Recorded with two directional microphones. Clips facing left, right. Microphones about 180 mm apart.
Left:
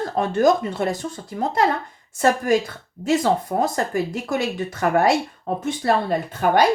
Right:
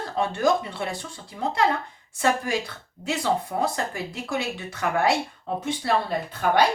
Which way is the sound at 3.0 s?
45° left (ahead or behind).